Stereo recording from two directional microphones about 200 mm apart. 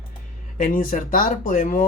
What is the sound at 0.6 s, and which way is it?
Speech, 40° left (ahead or behind).